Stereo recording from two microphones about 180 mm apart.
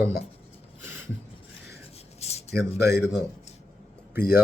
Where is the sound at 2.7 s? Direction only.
65° left (ahead or behind).